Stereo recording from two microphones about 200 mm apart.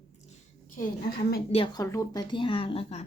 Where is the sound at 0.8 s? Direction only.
50° left (ahead or behind).